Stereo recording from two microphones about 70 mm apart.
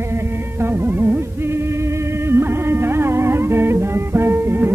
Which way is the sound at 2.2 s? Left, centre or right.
Right.